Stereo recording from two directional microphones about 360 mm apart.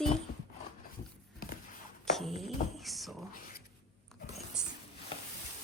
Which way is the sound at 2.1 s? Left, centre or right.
Centre.